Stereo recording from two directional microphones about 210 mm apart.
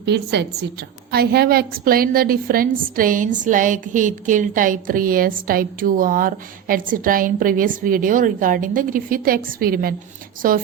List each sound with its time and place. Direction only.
0.0 s a woman's voice: 55° right (ahead or behind)